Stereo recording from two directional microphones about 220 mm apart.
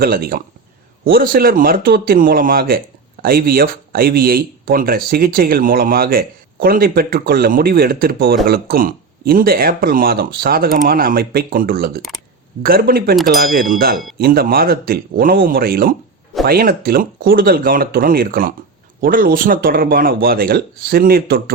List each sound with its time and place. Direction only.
0.0 s speech: 40° right (ahead or behind)